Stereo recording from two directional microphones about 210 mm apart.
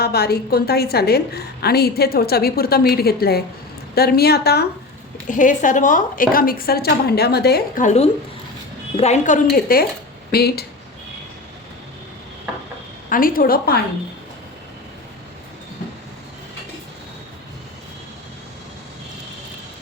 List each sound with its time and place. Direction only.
0.0 s a woman's voice: 50° left (ahead or behind)
5.3 s a woman's voice: 40° left (ahead or behind)
7.9 s a woman's voice: 30° left (ahead or behind); by 10.7 s 50° left (ahead or behind)
13.1 s a woman's voice: 40° left (ahead or behind)